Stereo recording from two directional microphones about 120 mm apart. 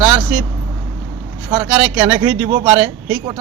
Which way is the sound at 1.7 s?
15° right (ahead or behind).